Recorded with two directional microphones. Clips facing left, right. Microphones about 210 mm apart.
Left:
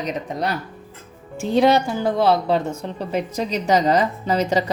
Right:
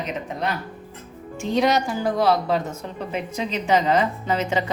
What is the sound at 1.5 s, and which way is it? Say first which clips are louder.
A woman's voice: left 4 dB; 30° left (ahead or behind).